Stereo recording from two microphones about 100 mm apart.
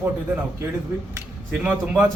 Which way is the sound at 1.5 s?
15° right (ahead or behind).